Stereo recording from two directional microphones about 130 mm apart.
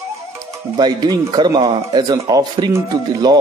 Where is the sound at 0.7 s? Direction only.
35° right (ahead or behind).